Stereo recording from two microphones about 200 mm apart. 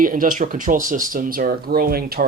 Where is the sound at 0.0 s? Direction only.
45° right (ahead or behind).